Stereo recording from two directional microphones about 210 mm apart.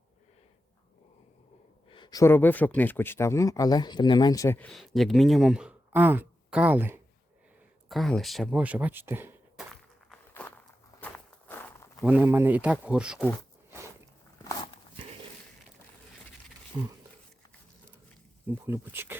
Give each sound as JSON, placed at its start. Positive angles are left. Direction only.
{"t": 1.9, "sound": "speech", "side_deg": 20}
{"t": 7.9, "sound": "speech", "side_deg": 0}
{"t": 11.0, "sound": "walk", "side_deg": 10}
{"t": 12.0, "sound": "speech", "side_deg": -10}
{"t": 16.7, "sound": "speech", "side_deg": -15}
{"t": 18.4, "sound": "speech", "side_deg": -10}